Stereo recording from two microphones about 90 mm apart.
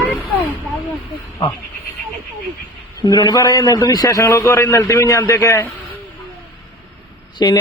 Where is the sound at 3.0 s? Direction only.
45° left (ahead or behind).